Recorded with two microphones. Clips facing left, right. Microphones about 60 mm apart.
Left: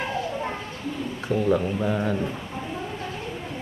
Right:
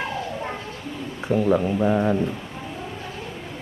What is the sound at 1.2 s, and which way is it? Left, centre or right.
Speech, centre.